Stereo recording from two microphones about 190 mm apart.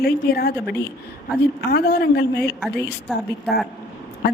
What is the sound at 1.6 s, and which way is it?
Speech, 55° left (ahead or behind).